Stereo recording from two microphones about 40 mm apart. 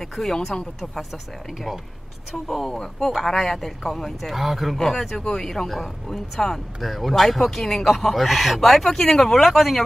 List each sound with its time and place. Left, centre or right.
0.2 s speech: centre
2.7 s speech: centre
3.3 s speech: centre
4.7 s speech: centre